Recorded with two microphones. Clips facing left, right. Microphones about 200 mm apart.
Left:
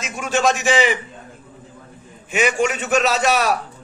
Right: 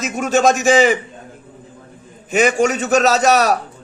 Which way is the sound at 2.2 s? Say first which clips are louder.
Right 4 dB; 40° right (ahead or behind).